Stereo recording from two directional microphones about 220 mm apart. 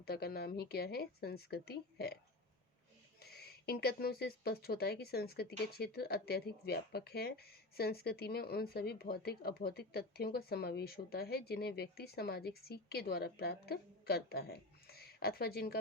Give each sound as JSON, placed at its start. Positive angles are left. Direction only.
{"t": 0.0, "sound": "speech", "side_deg": 45}
{"t": 3.2, "sound": "speech", "side_deg": 45}